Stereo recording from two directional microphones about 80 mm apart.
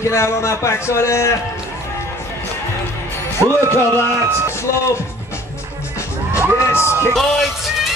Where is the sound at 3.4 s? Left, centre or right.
Right.